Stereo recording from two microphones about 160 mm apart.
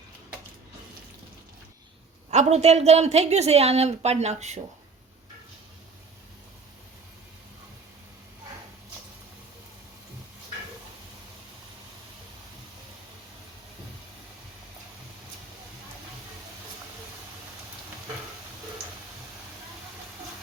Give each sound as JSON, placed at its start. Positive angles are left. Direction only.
{"t": 2.3, "sound": "a woman's voice", "side_deg": -45}